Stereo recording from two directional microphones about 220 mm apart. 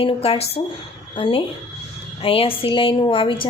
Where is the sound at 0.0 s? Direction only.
25° left (ahead or behind).